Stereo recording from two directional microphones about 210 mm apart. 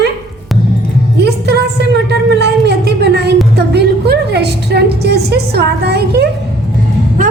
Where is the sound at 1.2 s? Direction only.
50° right (ahead or behind).